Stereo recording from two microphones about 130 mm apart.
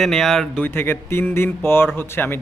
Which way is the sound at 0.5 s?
15° left (ahead or behind).